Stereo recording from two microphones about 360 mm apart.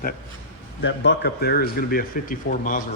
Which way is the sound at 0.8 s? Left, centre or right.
Left.